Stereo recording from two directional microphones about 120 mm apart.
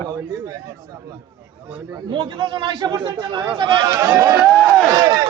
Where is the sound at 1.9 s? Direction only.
40° right (ahead or behind).